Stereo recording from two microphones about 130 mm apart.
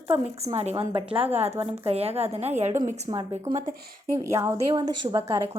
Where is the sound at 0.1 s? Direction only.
55° right (ahead or behind).